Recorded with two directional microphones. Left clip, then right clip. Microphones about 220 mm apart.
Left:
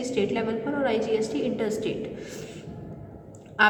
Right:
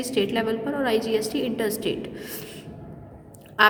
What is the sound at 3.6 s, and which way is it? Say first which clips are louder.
Duck: right 2 dB; 50° right (ahead or behind).